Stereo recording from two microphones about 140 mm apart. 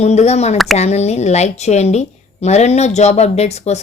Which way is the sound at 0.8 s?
50° left (ahead or behind).